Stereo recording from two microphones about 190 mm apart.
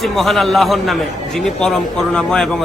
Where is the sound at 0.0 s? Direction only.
Centre (ahead or behind).